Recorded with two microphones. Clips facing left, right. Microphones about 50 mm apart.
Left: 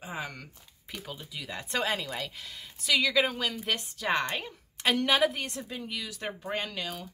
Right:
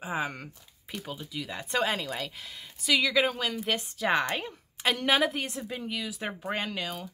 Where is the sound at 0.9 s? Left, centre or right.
Centre.